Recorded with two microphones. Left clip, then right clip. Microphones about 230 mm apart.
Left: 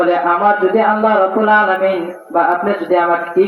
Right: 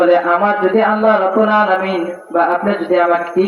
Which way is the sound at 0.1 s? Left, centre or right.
Right.